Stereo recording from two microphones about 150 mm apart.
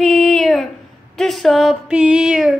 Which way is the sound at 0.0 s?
Centre (ahead or behind).